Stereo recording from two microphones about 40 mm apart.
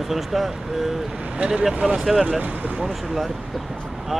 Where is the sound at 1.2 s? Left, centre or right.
Right.